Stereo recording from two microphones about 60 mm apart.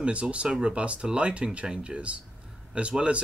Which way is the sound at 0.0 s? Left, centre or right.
Right.